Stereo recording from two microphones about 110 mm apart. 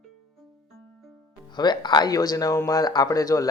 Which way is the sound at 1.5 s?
40° left (ahead or behind).